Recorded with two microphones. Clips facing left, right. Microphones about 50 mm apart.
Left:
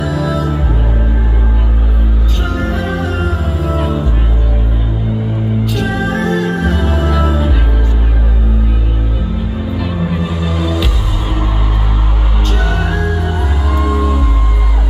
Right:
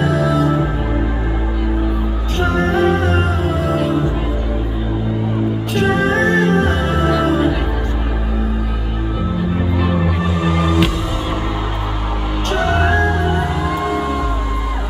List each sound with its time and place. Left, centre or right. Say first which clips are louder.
0.0 s music: right 1 dB; right
2.5 s music: right 4 dB; right
5.8 s music: right 5 dB; right
10.4 s music: right 6 dB; right